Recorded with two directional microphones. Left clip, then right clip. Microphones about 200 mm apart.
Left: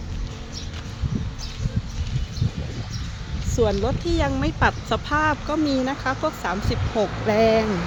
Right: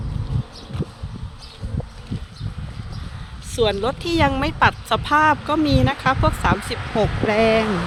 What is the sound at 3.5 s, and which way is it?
Speech, 15° right (ahead or behind).